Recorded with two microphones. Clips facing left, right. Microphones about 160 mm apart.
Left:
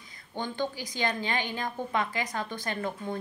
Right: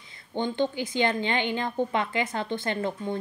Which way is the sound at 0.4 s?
25° right (ahead or behind).